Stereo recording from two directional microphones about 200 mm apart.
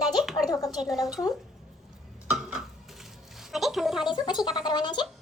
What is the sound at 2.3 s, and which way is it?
Dishes, 5° right (ahead or behind).